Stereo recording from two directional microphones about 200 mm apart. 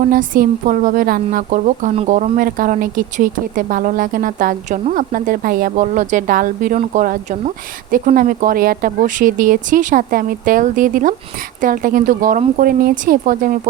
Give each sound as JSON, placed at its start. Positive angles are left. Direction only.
{"t": 0.1, "sound": "a woman's voice", "side_deg": -45}